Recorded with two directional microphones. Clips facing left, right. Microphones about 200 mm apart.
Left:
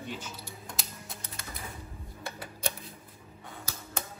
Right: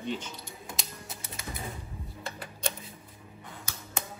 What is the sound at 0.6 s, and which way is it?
Typing, centre (ahead or behind).